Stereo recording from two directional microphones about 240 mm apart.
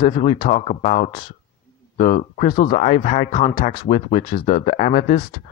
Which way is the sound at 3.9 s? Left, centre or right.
Left.